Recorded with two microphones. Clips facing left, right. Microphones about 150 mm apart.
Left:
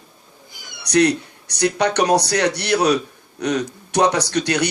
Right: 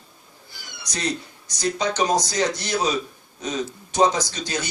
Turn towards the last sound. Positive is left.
turn(degrees=70)  # may be behind; listen again after turning